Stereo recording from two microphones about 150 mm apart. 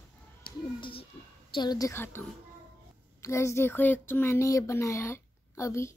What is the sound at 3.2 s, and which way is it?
Speech, 20° left (ahead or behind).